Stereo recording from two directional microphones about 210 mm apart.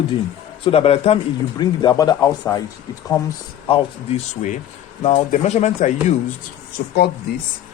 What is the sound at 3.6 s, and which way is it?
Speech, 30° left (ahead or behind).